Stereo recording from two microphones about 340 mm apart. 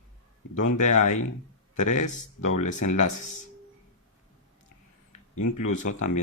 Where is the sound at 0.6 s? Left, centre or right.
Left.